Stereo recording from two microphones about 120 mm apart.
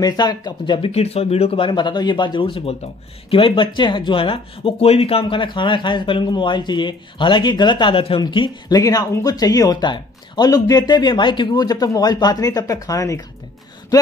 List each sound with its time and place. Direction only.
0.0 s speech: 35° left (ahead or behind)
0.8 s speech: 60° left (ahead or behind)
8.2 s speech: 40° left (ahead or behind)